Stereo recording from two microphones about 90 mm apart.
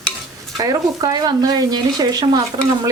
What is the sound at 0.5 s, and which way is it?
Speech, 40° right (ahead or behind).